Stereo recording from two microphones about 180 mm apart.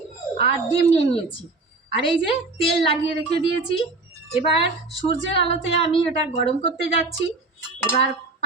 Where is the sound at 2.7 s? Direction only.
30° left (ahead or behind).